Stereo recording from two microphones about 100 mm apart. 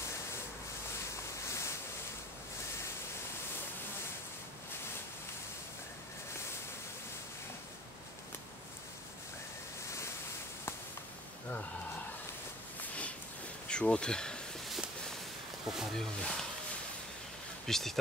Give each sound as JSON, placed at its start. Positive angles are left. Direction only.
{"t": 1.1, "sound": "waves", "side_deg": 30}
{"t": 12.8, "sound": "a sound", "side_deg": 15}
{"t": 13.7, "sound": "bee", "side_deg": 10}
{"t": 15.8, "sound": "speech", "side_deg": 5}
{"t": 17.6, "sound": "speech", "side_deg": 5}